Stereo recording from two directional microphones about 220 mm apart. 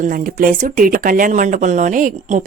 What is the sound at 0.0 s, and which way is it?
Speech, 40° right (ahead or behind).